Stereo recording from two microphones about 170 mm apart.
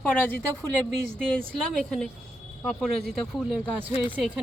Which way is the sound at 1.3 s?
5° left (ahead or behind).